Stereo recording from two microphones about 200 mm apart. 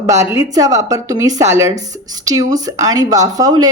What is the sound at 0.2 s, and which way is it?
Speech, 15° right (ahead or behind).